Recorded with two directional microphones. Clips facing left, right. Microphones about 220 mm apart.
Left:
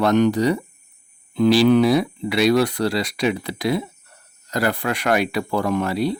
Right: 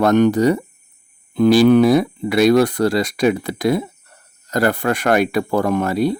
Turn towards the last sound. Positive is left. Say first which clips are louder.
# right 3 dB
turn(degrees=-50)  # may be behind; listen again after turning